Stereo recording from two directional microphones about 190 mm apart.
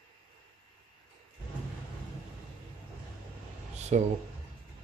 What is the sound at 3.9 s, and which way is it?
Speech, 40° right (ahead or behind).